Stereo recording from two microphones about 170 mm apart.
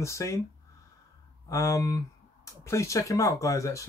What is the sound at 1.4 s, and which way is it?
Speech, 20° left (ahead or behind).